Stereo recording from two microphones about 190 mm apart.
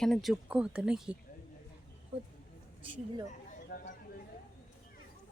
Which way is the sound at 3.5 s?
50° left (ahead or behind).